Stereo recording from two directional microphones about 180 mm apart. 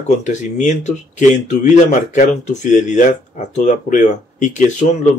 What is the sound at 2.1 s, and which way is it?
Speech, 40° left (ahead or behind).